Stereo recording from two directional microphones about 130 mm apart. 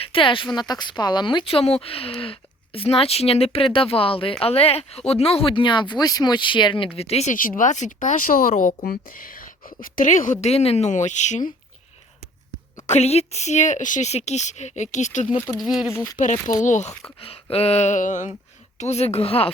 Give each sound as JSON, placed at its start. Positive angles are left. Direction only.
{"t": 0.0, "sound": "speech", "side_deg": 40}
{"t": 7.3, "sound": "speech", "side_deg": 90}
{"t": 10.4, "sound": "a woman's voice", "side_deg": 50}
{"t": 12.9, "sound": "a woman's voice", "side_deg": 55}
{"t": 15.5, "sound": "speech", "side_deg": -5}
{"t": 16.1, "sound": "speech", "side_deg": 75}
{"t": 17.2, "sound": "a woman's voice", "side_deg": 50}
{"t": 18.8, "sound": "speech", "side_deg": 55}